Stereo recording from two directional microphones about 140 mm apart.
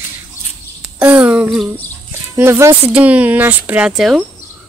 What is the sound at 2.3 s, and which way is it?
Speech, 20° right (ahead or behind).